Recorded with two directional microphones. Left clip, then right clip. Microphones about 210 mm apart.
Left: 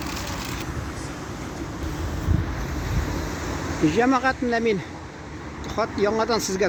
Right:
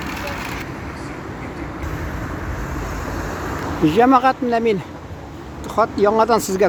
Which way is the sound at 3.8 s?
15° right (ahead or behind).